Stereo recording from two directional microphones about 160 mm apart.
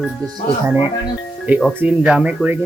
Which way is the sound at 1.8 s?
5° right (ahead or behind).